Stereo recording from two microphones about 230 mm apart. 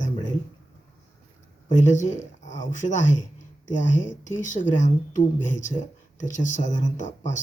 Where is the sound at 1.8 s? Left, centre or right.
Left.